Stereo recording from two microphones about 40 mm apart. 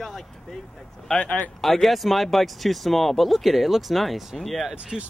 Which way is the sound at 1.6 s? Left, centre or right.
Centre.